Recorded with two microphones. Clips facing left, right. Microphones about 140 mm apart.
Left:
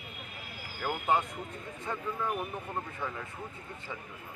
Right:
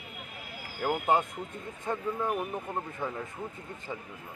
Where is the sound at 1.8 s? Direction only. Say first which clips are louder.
Right 4 dB; 20° right (ahead or behind).